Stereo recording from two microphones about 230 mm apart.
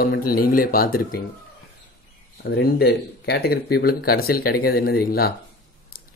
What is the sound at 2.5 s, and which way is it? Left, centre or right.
Speech, left.